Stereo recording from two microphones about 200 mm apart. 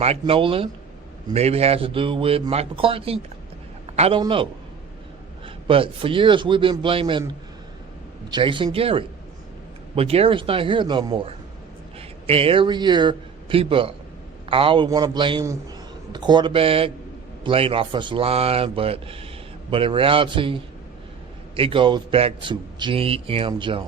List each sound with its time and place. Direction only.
0.0 s a man's voice: 30° right (ahead or behind)
5.6 s a man's voice: 25° right (ahead or behind)
8.3 s a man's voice: 25° right (ahead or behind)